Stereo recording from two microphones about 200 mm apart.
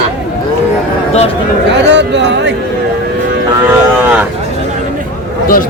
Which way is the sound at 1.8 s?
60° right (ahead or behind).